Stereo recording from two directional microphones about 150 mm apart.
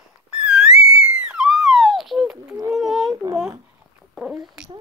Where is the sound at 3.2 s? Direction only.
30° right (ahead or behind).